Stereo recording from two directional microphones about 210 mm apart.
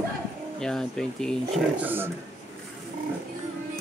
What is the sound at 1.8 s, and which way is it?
Speech, 10° right (ahead or behind).